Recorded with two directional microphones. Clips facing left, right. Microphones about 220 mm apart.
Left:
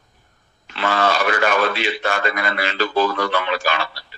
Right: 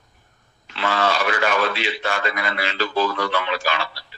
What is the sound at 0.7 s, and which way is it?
A man's voice, 50° left (ahead or behind).